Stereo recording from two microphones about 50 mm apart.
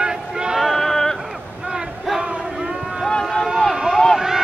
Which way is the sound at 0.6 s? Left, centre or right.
Centre.